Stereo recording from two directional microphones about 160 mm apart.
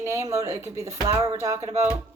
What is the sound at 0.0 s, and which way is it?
Speech, 20° right (ahead or behind).